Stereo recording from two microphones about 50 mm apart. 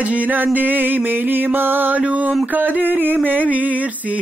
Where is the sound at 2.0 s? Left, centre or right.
Right.